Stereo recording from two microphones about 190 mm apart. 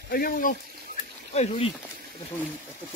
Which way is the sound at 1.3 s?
35° left (ahead or behind).